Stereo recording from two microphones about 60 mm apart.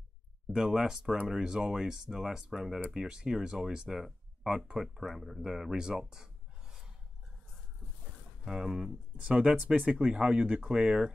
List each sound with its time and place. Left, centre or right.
0.6 s speech: centre
8.5 s speech: centre